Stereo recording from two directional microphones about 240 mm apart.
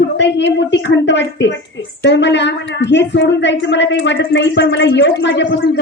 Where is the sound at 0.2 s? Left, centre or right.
Left.